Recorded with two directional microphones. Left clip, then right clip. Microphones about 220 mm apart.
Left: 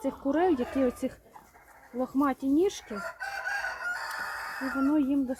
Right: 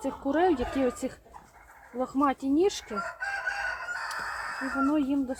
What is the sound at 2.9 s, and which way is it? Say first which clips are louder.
Chicken: right 3 dB; 50° left (ahead or behind).